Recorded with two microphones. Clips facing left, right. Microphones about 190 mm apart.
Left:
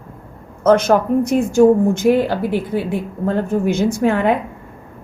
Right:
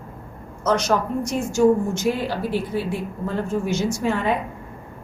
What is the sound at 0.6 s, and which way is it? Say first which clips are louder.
A woman's voice: left 8 dB; 55° left (ahead or behind).